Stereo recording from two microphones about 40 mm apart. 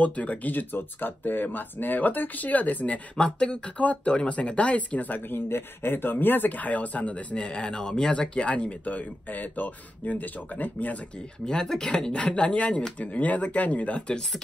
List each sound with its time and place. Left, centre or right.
0.0 s speech: left
0.5 s speech: left
3.2 s speech: left
5.5 s speech: left
11.4 s speech: centre